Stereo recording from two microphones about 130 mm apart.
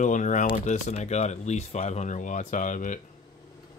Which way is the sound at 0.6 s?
60° left (ahead or behind).